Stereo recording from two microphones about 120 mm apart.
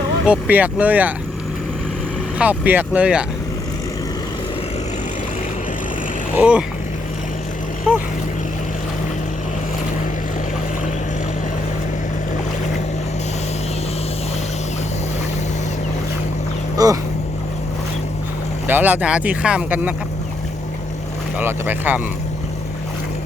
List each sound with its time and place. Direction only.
0.3 s speech: 15° right (ahead or behind)
2.4 s speech: 15° right (ahead or behind)
6.3 s speech: 10° right (ahead or behind)
16.7 s vehicle: 30° right (ahead or behind)
18.7 s speech: 15° right (ahead or behind)
21.3 s speech: 20° right (ahead or behind)